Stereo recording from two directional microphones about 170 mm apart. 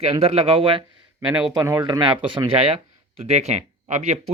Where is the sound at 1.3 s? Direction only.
5° right (ahead or behind).